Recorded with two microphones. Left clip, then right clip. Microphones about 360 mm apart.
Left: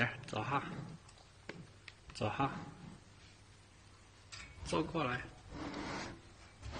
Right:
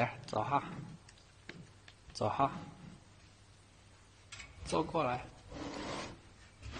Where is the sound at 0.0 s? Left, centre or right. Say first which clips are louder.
Right 3 dB; centre.